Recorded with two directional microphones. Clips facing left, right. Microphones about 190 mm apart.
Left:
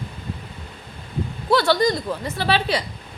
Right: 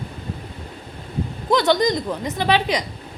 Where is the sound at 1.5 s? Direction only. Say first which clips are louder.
Right 1 dB; 20° right (ahead or behind).